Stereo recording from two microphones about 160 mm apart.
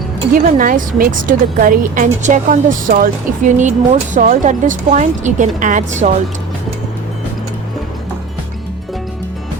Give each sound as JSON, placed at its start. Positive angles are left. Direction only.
{"t": 0.3, "sound": "a woman's voice", "side_deg": -60}